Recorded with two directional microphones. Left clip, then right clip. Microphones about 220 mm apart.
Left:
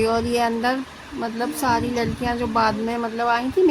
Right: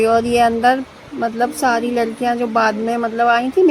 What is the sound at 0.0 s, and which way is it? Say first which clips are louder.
Speech: right 7 dB; 10° right (ahead or behind).